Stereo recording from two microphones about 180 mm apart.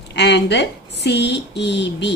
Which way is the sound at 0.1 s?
70° left (ahead or behind).